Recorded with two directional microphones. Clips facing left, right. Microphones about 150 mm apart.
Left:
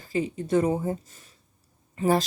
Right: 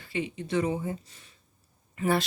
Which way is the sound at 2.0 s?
40° left (ahead or behind).